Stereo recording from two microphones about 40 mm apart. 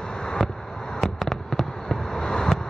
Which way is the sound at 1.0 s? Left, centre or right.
Centre.